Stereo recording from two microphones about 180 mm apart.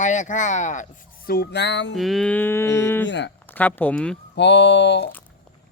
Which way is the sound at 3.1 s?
80° left.